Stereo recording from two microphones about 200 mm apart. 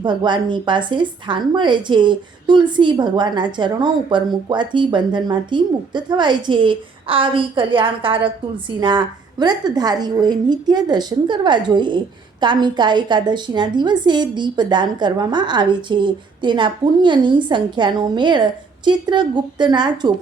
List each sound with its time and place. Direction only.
0.0 s speech: 20° right (ahead or behind)